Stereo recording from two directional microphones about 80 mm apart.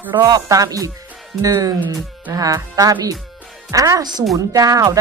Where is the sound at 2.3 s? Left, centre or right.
Right.